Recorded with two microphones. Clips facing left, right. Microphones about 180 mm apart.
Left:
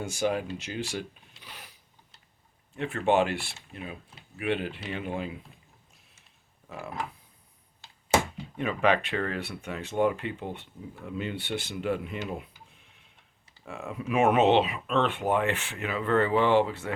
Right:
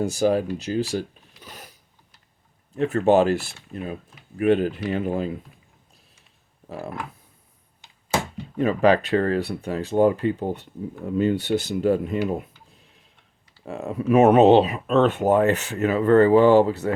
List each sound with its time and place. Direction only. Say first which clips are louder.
0.0 s speech: right 8 dB; 35° right (ahead or behind)
1.4 s a sound: right 6 dB; 45° right (ahead or behind)
2.7 s speech: right 7 dB; 40° right (ahead or behind)
6.7 s speech: right 6 dB; 35° right (ahead or behind)
7.8 s a sound: left 1 dB; 15° right (ahead or behind)
8.5 s speech: right 7 dB; 40° right (ahead or behind)